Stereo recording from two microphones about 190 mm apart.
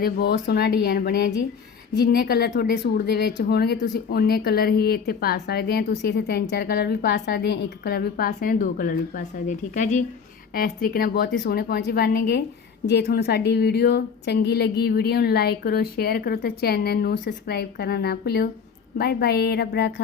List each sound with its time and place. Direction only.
0.0 s speech: 55° left (ahead or behind)